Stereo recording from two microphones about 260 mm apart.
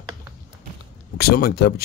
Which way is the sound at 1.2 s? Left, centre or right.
Left.